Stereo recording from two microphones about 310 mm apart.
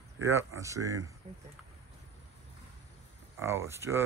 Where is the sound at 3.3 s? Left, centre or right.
Centre.